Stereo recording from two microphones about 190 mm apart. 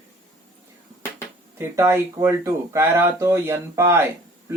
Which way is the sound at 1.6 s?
10° right (ahead or behind).